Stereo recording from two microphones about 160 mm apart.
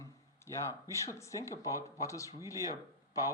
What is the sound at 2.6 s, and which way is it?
Speech, 20° right (ahead or behind).